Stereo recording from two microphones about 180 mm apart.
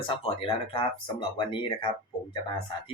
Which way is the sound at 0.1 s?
30° left (ahead or behind).